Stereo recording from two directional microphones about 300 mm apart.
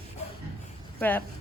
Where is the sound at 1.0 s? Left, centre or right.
Centre.